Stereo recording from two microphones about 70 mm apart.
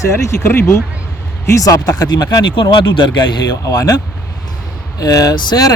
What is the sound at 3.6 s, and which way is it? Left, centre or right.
Speech, left.